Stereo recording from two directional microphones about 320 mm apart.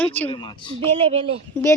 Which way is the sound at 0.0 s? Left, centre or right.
Centre.